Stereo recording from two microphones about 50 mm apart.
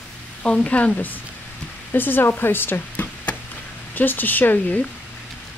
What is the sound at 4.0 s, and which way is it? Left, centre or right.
Speech, left.